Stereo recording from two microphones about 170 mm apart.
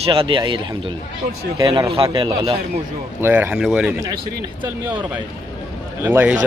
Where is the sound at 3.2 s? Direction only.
10° right (ahead or behind).